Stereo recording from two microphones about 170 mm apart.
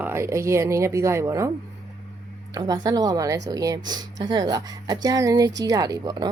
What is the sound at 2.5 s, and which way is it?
Speech, 20° right (ahead or behind).